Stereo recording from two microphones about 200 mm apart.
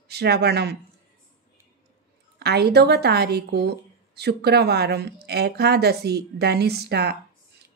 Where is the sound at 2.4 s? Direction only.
55° right (ahead or behind).